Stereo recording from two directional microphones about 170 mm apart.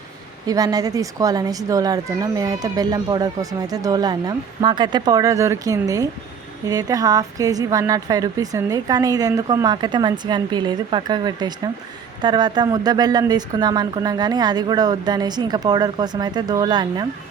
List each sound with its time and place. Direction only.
0.4 s speech: 20° right (ahead or behind)